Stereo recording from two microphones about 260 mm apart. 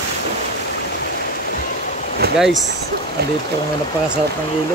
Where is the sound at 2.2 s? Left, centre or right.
Right.